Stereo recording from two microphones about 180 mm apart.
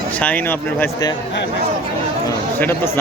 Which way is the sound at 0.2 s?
10° left (ahead or behind).